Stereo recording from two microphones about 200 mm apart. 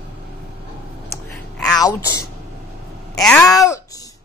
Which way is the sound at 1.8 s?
20° left (ahead or behind).